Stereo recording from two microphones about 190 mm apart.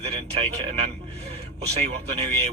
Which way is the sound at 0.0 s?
30° right (ahead or behind).